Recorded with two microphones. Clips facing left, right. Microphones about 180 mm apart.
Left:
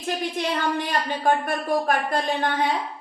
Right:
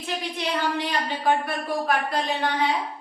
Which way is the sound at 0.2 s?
50° left (ahead or behind).